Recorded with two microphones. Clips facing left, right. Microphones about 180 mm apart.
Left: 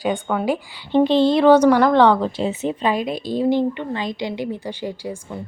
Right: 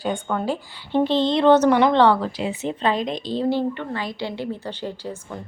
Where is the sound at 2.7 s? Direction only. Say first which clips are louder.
Left 2 dB; 10° left (ahead or behind).